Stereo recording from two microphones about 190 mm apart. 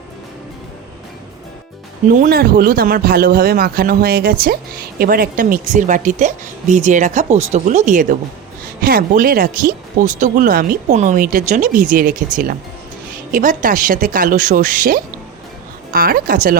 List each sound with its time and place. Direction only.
2.0 s a woman's voice: 45° right (ahead or behind)